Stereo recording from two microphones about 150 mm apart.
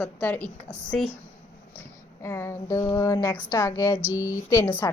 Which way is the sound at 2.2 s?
20° left (ahead or behind).